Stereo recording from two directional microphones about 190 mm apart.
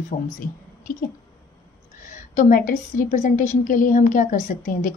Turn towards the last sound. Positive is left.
turn(degrees=45)  # may be behind; listen again after turning